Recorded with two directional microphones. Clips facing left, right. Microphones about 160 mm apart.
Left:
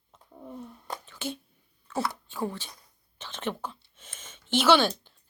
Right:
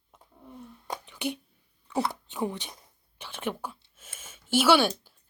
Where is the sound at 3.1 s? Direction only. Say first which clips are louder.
Even; 10° right (ahead or behind).